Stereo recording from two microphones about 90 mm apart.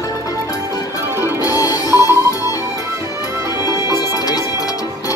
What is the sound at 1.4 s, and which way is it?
Music, 40° left (ahead or behind).